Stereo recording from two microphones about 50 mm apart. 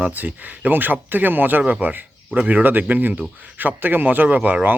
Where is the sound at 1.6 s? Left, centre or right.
Right.